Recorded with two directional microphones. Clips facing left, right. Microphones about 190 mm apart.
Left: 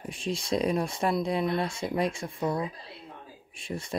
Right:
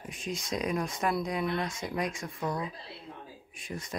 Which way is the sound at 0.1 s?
30° left (ahead or behind).